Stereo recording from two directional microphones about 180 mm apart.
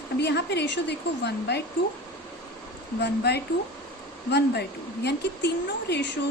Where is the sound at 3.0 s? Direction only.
70° left (ahead or behind).